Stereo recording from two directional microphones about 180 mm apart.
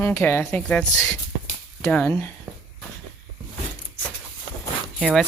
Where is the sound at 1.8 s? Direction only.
10° left (ahead or behind).